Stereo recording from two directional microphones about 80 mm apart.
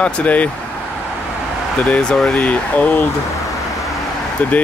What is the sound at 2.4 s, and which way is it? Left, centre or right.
Speech, centre.